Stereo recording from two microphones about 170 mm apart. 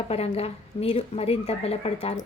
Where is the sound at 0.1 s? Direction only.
35° left (ahead or behind).